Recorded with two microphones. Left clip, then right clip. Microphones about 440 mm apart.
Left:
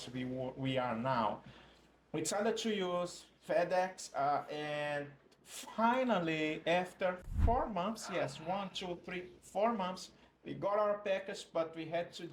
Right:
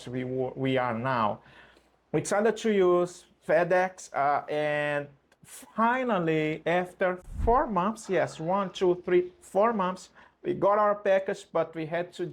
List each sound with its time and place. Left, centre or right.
0.0 s speech: right
7.5 s speech: right